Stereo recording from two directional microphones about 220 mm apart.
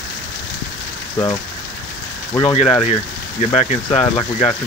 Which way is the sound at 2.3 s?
25° left (ahead or behind).